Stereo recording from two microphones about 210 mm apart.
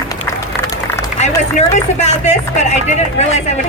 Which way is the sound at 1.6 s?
30° left (ahead or behind).